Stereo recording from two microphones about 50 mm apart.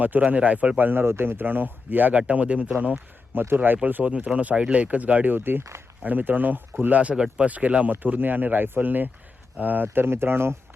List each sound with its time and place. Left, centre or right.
0.0 s speech: right
0.8 s speech: right
1.0 s speech: right
3.3 s speech: right
4.0 s speech: right
7.0 s speech: right